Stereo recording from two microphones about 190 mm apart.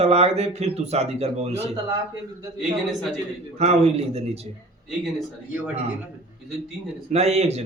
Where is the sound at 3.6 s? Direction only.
35° right (ahead or behind).